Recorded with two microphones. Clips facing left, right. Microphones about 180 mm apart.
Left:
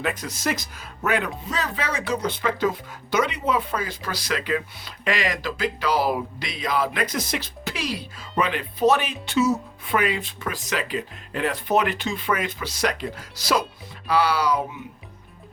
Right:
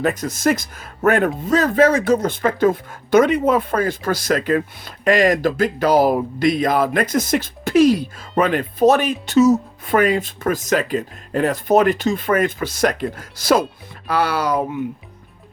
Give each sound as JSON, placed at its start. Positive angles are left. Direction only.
{"t": 0.0, "sound": "speech", "side_deg": -45}